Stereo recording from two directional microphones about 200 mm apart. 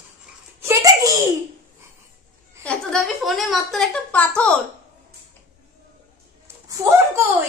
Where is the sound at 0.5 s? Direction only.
15° right (ahead or behind).